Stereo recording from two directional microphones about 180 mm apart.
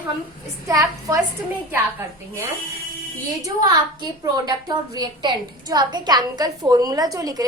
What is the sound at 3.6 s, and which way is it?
A woman's voice, 20° right (ahead or behind).